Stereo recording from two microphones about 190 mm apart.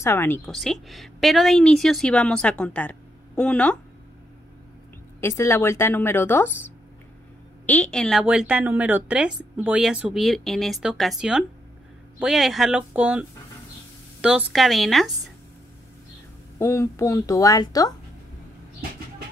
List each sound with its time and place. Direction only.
0.0 s a woman's voice: 10° left (ahead or behind)
0.5 s a woman's voice: centre (ahead or behind)
5.2 s a woman's voice: 15° left (ahead or behind)
7.6 s a woman's voice: 5° left (ahead or behind)
14.2 s a woman's voice: 5° right (ahead or behind)
16.5 s a woman's voice: 15° left (ahead or behind)